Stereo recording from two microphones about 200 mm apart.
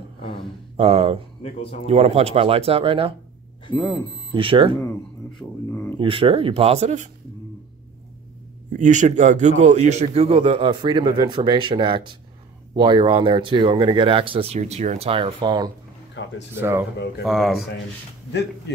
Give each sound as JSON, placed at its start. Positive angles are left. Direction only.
{"t": 0.7, "sound": "a man's voice", "side_deg": -30}
{"t": 1.4, "sound": "speech", "side_deg": 30}
{"t": 1.9, "sound": "a man's voice", "side_deg": -30}
{"t": 4.3, "sound": "a man's voice", "side_deg": -25}
{"t": 5.7, "sound": "speech", "side_deg": 10}
{"t": 5.9, "sound": "a man's voice", "side_deg": -25}
{"t": 8.7, "sound": "a man's voice", "side_deg": -40}
{"t": 16.2, "sound": "speech", "side_deg": 70}
{"t": 16.5, "sound": "speech", "side_deg": -10}
{"t": 17.2, "sound": "speech", "side_deg": 0}